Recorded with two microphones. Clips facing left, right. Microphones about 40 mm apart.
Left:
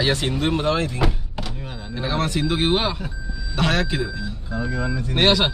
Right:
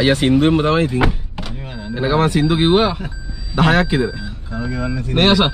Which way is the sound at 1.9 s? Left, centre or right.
Right.